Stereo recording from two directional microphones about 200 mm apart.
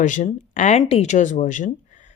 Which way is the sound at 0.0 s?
40° left (ahead or behind).